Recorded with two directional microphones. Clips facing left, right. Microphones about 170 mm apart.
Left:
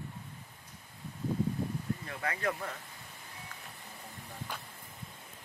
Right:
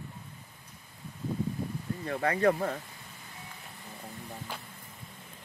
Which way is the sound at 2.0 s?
35° right (ahead or behind).